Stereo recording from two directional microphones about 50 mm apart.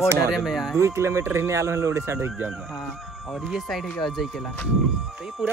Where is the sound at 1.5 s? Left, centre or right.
Right.